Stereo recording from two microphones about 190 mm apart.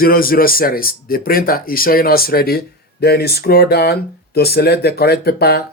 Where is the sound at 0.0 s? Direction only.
50° left (ahead or behind).